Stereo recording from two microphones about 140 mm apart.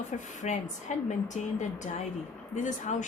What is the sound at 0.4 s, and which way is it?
A woman's voice, 60° left (ahead or behind).